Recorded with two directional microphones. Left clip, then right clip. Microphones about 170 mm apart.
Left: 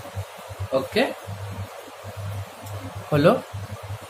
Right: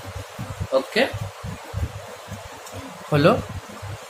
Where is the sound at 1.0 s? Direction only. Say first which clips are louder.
Right 2 dB; 5° right (ahead or behind).